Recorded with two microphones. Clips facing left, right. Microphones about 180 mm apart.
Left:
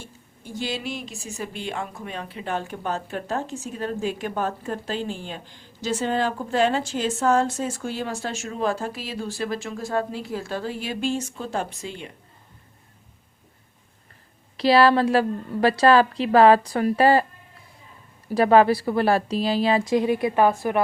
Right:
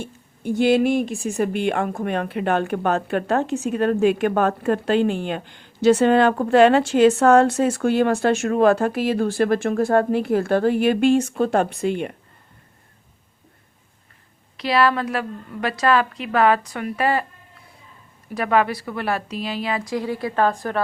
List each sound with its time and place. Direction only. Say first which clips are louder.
0.0 s speech: right 12 dB; 60° right (ahead or behind)
14.5 s a woman's voice: left 3 dB; 30° left (ahead or behind)
18.3 s a woman's voice: left 4 dB; 30° left (ahead or behind); by 20.8 s 10° left (ahead or behind)